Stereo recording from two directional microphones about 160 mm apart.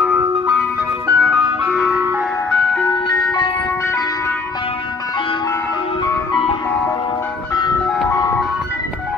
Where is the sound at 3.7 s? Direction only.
15° left (ahead or behind).